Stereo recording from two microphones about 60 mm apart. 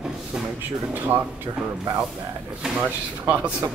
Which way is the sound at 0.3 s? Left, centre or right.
Centre.